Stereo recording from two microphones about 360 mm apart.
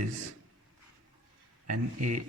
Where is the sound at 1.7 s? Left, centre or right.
Right.